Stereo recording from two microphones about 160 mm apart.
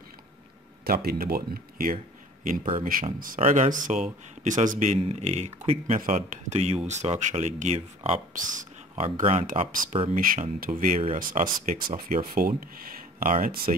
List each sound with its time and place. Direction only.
0.8 s speech: 70° right (ahead or behind)
3.3 s speech: 50° right (ahead or behind)
9.2 s speech: 35° right (ahead or behind)
10.1 s speech: 55° right (ahead or behind)